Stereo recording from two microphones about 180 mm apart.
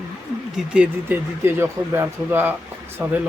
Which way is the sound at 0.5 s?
5° right (ahead or behind).